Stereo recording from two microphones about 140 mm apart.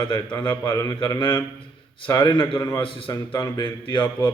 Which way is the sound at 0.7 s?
25° left (ahead or behind).